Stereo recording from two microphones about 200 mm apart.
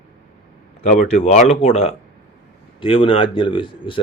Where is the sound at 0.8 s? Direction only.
35° left (ahead or behind).